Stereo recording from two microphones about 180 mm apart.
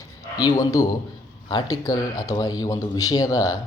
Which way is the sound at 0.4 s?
20° left (ahead or behind).